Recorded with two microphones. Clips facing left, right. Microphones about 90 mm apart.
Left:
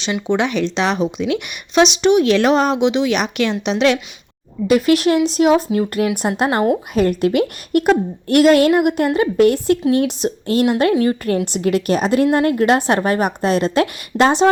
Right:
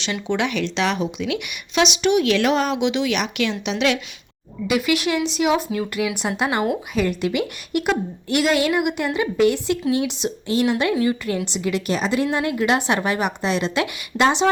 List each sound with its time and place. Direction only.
0.0 s a woman's voice: 20° left (ahead or behind); by 14.5 s 40° left (ahead or behind)